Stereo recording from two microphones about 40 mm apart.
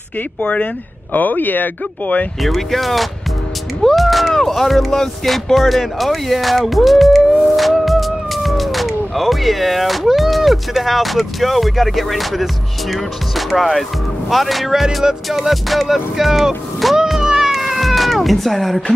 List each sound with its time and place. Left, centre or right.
0.4 s speech: left
1.1 s speech: left
2.4 s speech: centre
17.2 s cat: centre